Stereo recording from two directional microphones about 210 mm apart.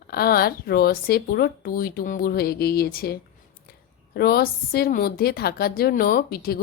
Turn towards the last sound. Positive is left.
turn(degrees=45)  # may be behind; listen again after turning